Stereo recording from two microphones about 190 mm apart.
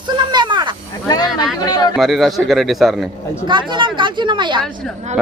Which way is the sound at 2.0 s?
Centre (ahead or behind).